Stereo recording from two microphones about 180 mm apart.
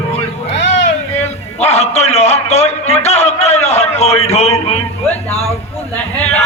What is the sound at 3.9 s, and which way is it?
Speech, 35° left (ahead or behind).